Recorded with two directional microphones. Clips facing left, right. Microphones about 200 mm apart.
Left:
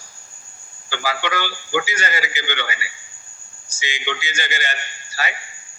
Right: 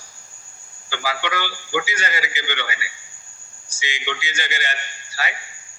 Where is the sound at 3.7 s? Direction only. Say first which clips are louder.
Left 2 dB; 45° left (ahead or behind).